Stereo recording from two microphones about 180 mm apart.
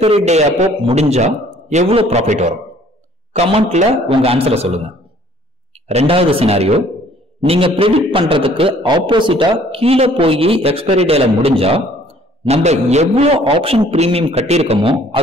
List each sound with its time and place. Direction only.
0.0 s a man's voice: 35° right (ahead or behind)
5.9 s a man's voice: 35° right (ahead or behind)